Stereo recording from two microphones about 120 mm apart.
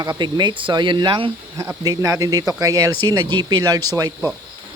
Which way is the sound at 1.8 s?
30° right (ahead or behind).